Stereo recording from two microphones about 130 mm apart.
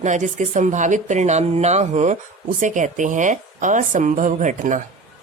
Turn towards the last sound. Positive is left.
turn(degrees=-75)  # may be behind; listen again after turning